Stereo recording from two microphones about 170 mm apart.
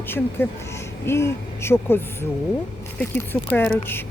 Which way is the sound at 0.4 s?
15° left (ahead or behind).